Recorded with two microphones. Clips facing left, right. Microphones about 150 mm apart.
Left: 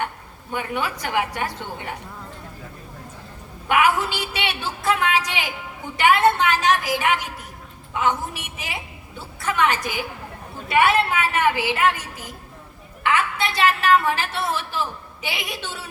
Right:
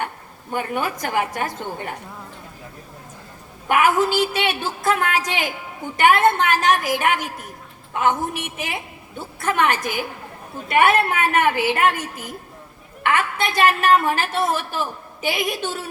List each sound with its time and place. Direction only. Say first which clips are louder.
0.5 s a woman's voice: right 2 dB; 45° right (ahead or behind)
3.7 s a woman's voice: right 2 dB; 45° right (ahead or behind)